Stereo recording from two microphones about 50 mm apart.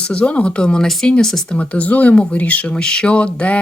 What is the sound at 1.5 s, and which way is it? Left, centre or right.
Speech, left.